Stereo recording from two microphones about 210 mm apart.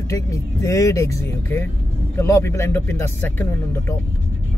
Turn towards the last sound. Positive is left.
turn(degrees=10)  # may be behind; listen again after turning